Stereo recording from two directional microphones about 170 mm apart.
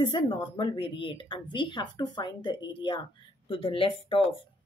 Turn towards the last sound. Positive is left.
turn(degrees=35)  # may be behind; listen again after turning